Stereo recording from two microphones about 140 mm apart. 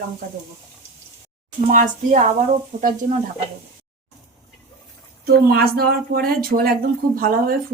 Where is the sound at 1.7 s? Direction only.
65° right (ahead or behind).